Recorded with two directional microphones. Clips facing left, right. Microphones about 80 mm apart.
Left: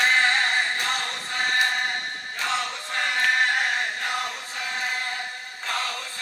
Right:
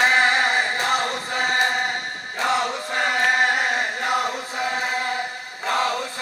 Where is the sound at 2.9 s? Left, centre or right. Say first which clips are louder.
Right 3 dB; centre.